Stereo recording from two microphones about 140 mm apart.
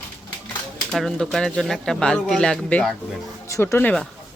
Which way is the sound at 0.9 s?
5° left (ahead or behind).